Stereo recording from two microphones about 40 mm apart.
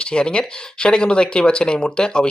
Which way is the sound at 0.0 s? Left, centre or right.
Left.